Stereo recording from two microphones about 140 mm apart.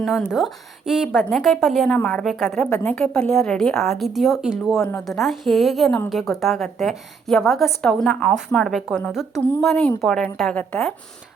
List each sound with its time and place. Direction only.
0.0 s a woman's voice: 5° right (ahead or behind)
2.6 s a woman's voice: 20° left (ahead or behind)
2.9 s a woman's voice: 5° left (ahead or behind)
4.8 s a woman's voice: 15° left (ahead or behind)
5.2 s a woman's voice: centre (ahead or behind)